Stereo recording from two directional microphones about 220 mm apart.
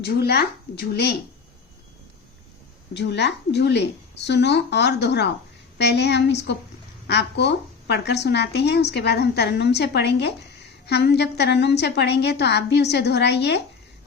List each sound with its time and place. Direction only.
0.0 s a woman's voice: 45° left (ahead or behind)
2.9 s a woman's voice: 50° left (ahead or behind)